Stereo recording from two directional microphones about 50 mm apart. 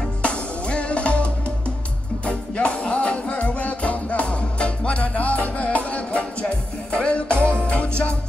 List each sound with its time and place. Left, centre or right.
0.2 s music: left